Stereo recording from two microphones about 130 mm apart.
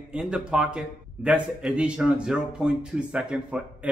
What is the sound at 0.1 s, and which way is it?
A man's voice, 5° right (ahead or behind).